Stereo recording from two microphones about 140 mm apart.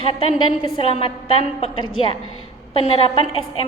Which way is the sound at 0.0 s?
40° left (ahead or behind).